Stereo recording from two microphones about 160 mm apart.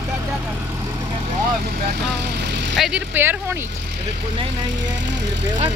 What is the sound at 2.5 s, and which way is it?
Vehicle, 90° right.